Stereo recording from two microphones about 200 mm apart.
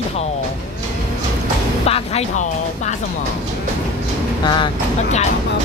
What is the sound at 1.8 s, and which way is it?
Speech, 30° left (ahead or behind).